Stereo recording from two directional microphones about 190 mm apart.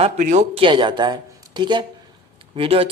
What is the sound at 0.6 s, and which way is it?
Speech, 25° right (ahead or behind).